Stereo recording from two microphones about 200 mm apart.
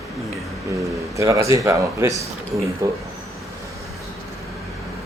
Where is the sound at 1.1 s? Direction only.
15° right (ahead or behind).